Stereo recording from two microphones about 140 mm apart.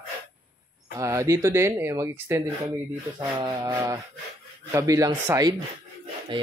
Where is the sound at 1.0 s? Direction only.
20° right (ahead or behind).